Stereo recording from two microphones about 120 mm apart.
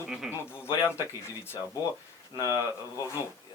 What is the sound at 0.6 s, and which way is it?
Speech, 25° left (ahead or behind).